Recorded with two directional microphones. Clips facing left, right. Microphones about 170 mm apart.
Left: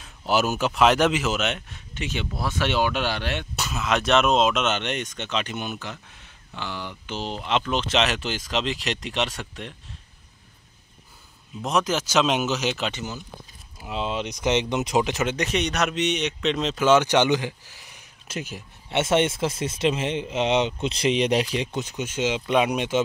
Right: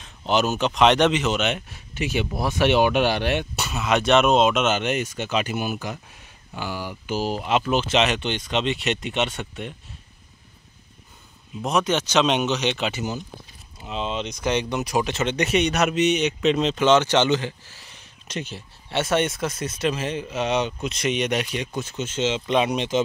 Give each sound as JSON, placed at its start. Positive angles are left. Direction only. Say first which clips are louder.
{"t": 0.0, "sound": "speech", "louder": "right 1 dB", "side_deg": 5}
{"t": 3.5, "sound": "speech", "louder": "right 2 dB", "side_deg": 0}
{"t": 11.6, "sound": "speech", "louder": "right 2 dB", "side_deg": 0}
{"t": 13.7, "sound": "speech", "louder": "even", "side_deg": 10}
{"t": 15.2, "sound": "speech", "louder": "right 4 dB", "side_deg": 0}
{"t": 18.9, "sound": "speech", "louder": "left 1 dB", "side_deg": 25}
{"t": 21.7, "sound": "speech", "louder": "right 1 dB", "side_deg": 15}